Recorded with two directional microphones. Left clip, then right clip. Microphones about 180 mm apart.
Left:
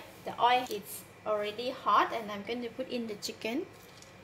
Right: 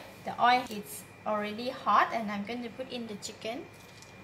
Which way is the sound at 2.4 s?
45° left (ahead or behind).